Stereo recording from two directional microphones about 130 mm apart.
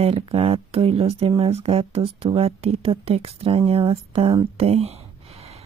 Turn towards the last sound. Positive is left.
turn(degrees=-50)  # may be behind; listen again after turning